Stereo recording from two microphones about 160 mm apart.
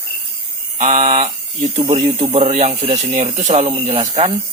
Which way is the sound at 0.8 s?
45° right (ahead or behind).